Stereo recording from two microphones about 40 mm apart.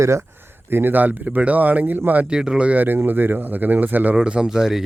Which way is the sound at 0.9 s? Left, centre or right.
Right.